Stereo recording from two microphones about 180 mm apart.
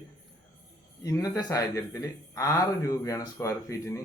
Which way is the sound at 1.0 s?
20° left (ahead or behind).